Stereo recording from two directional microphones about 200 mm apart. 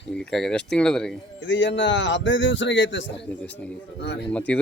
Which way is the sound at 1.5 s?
65° left (ahead or behind).